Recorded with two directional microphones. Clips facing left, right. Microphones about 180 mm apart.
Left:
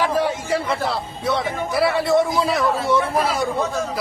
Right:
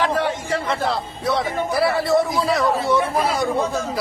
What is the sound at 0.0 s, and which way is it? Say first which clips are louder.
A man's voice: left 1 dB; 10° left (ahead or behind).